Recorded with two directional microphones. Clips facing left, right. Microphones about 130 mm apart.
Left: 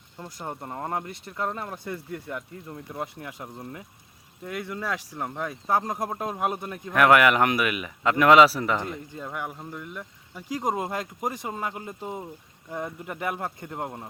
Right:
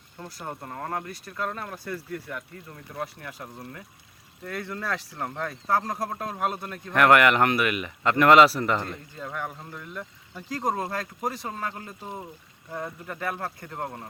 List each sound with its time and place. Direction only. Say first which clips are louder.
0.2 s speech: left 1 dB; 20° left (ahead or behind)
6.9 s a man's voice: even; 5° left (ahead or behind)